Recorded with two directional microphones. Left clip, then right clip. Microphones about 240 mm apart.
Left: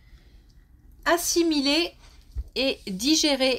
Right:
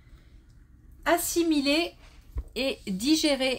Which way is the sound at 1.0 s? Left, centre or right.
Left.